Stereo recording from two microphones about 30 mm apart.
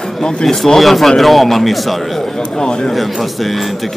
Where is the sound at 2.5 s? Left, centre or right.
Left.